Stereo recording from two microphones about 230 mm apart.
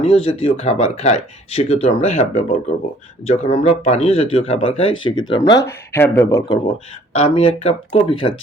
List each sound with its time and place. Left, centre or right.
0.0 s speech: left
7.2 s speech: left